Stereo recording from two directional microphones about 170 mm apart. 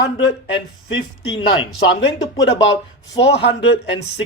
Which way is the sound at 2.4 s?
90° left.